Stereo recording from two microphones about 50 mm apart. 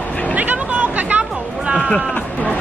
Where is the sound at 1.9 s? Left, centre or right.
Left.